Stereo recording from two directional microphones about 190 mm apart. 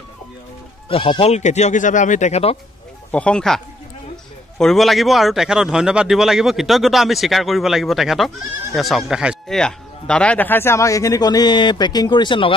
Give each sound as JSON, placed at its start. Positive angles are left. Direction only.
{"t": 0.8, "sound": "speech", "side_deg": 25}
{"t": 3.1, "sound": "speech", "side_deg": 5}